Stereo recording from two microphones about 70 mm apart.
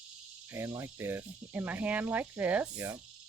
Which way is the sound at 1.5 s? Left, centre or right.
Right.